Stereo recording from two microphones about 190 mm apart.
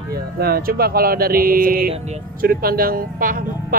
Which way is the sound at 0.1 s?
55° right (ahead or behind).